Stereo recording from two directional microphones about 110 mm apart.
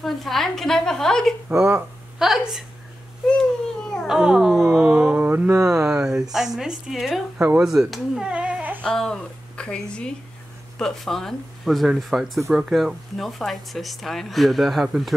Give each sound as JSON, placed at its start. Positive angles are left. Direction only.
{"t": 0.0, "sound": "speech", "side_deg": 0}
{"t": 1.5, "sound": "speech", "side_deg": -25}
{"t": 1.8, "sound": "a woman's voice", "side_deg": -5}
{"t": 3.8, "sound": "a sound", "side_deg": 5}
{"t": 4.1, "sound": "a sound", "side_deg": -5}
{"t": 5.9, "sound": "speech", "side_deg": -5}
{"t": 8.8, "sound": "a woman's voice", "side_deg": 5}